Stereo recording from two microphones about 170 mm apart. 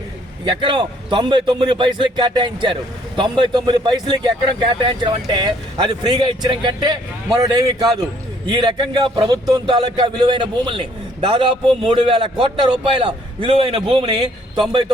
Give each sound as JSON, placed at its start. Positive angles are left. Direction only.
{"t": 0.4, "sound": "a man's voice", "side_deg": -30}